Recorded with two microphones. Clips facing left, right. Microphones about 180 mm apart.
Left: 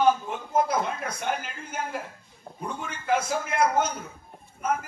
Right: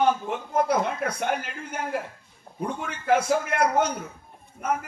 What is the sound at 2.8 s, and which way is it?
Speech, 70° right (ahead or behind).